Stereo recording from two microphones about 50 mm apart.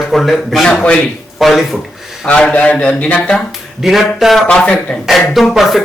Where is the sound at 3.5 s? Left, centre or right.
Centre.